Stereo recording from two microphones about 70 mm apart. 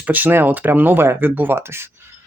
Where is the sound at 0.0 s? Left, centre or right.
Right.